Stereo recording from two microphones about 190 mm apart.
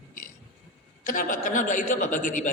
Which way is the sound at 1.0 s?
45° left (ahead or behind).